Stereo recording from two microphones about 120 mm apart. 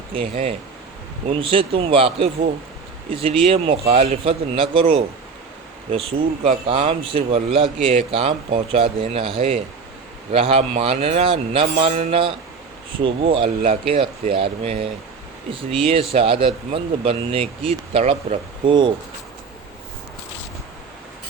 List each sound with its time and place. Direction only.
0.1 s speech: 50° right (ahead or behind)
10.3 s a man's voice: 55° right (ahead or behind)
18.6 s speech: 40° right (ahead or behind)